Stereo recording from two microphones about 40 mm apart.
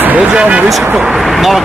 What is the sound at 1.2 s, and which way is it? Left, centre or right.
Speech, centre.